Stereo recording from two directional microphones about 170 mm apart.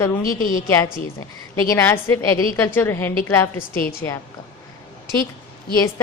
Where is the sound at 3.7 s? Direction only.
60° left (ahead or behind).